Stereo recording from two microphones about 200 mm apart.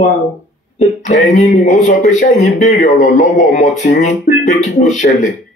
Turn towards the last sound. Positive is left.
turn(degrees=35)  # may be behind; listen again after turning